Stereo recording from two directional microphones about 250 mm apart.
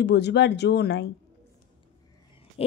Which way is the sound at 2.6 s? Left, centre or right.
Left.